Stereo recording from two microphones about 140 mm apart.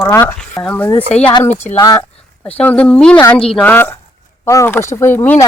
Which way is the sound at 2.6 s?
10° left (ahead or behind).